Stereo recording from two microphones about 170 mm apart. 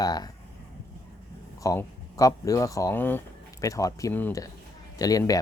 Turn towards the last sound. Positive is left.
turn(degrees=20)  # may be behind; listen again after turning